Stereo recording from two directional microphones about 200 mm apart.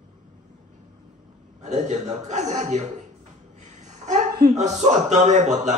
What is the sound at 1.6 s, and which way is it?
Speech, 35° right (ahead or behind).